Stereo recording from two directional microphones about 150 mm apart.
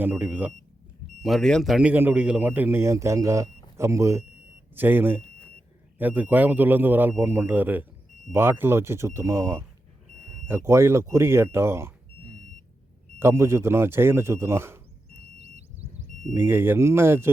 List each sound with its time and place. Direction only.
0.0 s a man's voice: 10° right (ahead or behind)
1.2 s a man's voice: centre (ahead or behind); by 11.9 s 15° right (ahead or behind)
13.1 s a man's voice: 20° right (ahead or behind)
15.2 s music: 45° right (ahead or behind)
16.3 s a man's voice: 15° right (ahead or behind)